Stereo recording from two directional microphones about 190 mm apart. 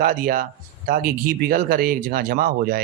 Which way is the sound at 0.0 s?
45° right (ahead or behind).